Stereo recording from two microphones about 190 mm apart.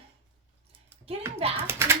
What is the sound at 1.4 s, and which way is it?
Speech, 30° right (ahead or behind).